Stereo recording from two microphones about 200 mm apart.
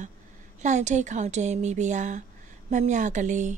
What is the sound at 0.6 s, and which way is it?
Speech, 35° right (ahead or behind).